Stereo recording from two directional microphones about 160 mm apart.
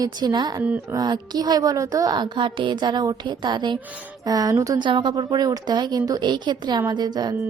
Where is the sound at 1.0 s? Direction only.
25° right (ahead or behind).